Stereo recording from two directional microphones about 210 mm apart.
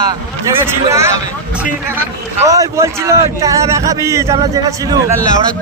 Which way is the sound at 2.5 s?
15° right (ahead or behind).